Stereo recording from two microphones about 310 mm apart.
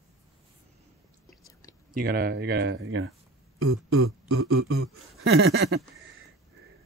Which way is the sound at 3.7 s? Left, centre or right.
Right.